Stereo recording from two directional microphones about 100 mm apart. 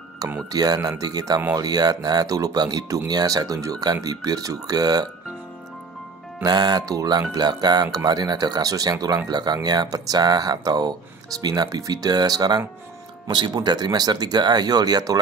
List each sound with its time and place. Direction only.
0.5 s speech: 40° right (ahead or behind)
6.4 s speech: 45° right (ahead or behind)